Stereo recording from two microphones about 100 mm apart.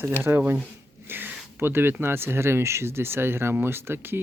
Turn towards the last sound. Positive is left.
turn(degrees=-25)  # may be behind; listen again after turning